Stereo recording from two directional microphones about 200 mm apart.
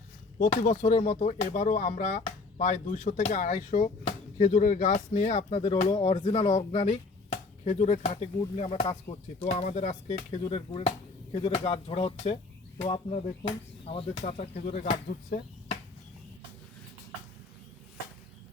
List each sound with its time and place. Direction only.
0.6 s speech: 35° left (ahead or behind)